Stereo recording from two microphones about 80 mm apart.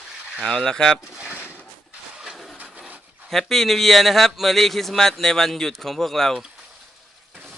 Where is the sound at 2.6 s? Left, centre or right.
Centre.